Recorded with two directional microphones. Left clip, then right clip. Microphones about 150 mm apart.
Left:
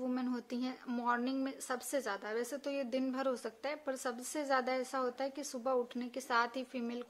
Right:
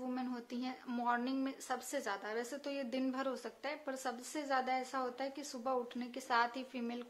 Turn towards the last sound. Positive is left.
turn(degrees=30)  # may be behind; listen again after turning